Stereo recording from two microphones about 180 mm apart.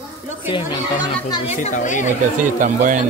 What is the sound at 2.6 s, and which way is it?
Speech, 45° right (ahead or behind).